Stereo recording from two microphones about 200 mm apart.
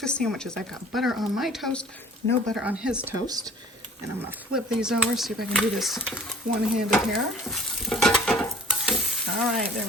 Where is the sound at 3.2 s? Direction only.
20° right (ahead or behind).